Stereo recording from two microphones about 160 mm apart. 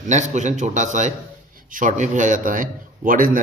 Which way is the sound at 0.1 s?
50° right (ahead or behind).